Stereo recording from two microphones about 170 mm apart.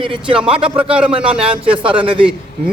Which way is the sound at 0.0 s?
30° right (ahead or behind).